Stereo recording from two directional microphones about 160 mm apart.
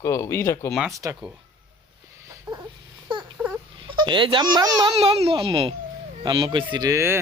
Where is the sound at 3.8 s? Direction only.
30° right (ahead or behind).